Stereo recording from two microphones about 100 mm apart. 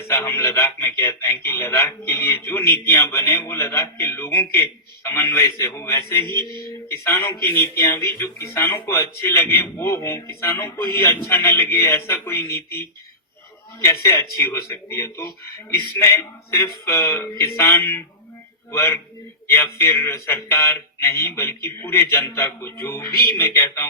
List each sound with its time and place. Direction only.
0.1 s speech: 25° left (ahead or behind)
6.2 s a sound: 50° right (ahead or behind)
6.8 s speech: 25° left (ahead or behind)